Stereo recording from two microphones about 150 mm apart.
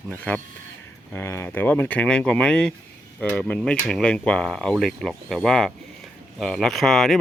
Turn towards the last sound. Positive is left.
turn(degrees=0)  # may be behind; listen again after turning